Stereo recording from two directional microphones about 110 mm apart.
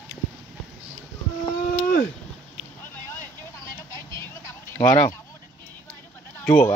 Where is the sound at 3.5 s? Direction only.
25° left (ahead or behind).